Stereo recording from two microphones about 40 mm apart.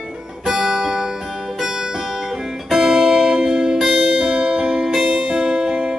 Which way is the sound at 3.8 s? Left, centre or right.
Centre.